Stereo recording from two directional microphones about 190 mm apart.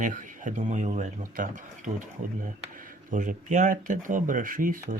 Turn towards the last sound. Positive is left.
turn(degrees=-45)  # may be behind; listen again after turning